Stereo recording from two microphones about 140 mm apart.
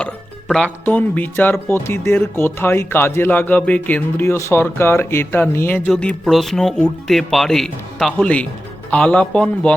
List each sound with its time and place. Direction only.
0.0 s speech: 5° left (ahead or behind)